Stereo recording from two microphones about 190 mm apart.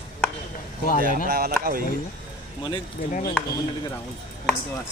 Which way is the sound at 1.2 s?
55° right (ahead or behind).